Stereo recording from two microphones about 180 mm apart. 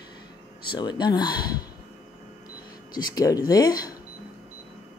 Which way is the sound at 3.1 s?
20° left (ahead or behind).